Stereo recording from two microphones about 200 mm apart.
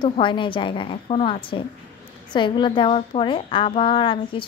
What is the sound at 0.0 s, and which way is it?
A woman's voice, 25° left (ahead or behind).